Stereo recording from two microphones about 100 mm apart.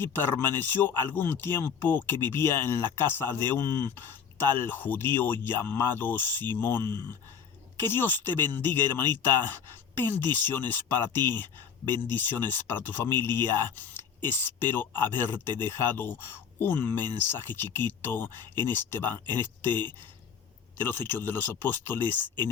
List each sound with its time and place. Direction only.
0.0 s speech: 25° left (ahead or behind)